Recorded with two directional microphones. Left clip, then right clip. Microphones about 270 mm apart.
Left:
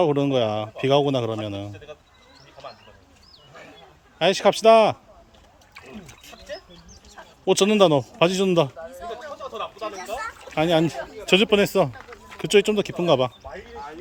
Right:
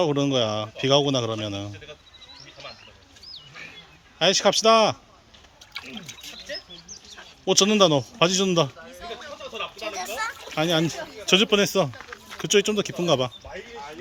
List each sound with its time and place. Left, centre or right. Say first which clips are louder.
0.0 s a man's voice: left 2 dB; centre
1.7 s speech: left 1 dB; left
4.2 s a man's voice: left 1 dB; centre
6.8 s bird: right 6 dB; left
7.4 s a man's voice: left 1 dB; centre
8.8 s a sound: left 3 dB; left
10.5 s speech: left 4 dB; centre
13.5 s a sound: left 1 dB; left